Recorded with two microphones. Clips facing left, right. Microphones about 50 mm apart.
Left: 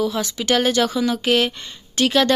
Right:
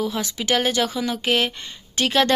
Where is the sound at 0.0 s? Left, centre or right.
Right.